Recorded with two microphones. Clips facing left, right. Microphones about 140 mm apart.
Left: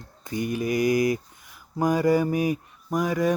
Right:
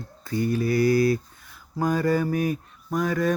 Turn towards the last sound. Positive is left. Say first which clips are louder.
# even
turn(degrees=15)  # may be behind; listen again after turning